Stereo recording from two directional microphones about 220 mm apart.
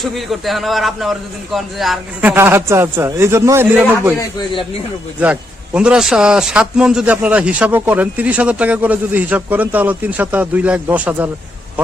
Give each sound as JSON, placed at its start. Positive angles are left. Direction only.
{"t": 0.0, "sound": "a man's voice", "side_deg": 0}
{"t": 4.4, "sound": "a man's voice", "side_deg": 25}
{"t": 5.2, "sound": "a man's voice", "side_deg": -5}